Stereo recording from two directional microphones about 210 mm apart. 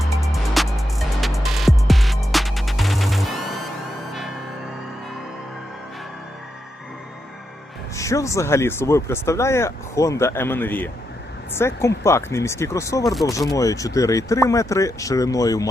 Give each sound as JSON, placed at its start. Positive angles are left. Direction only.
{"t": 0.0, "sound": "music", "side_deg": 0}
{"t": 7.9, "sound": "speech", "side_deg": 15}